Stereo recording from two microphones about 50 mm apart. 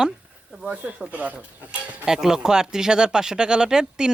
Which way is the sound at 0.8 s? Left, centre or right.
Right.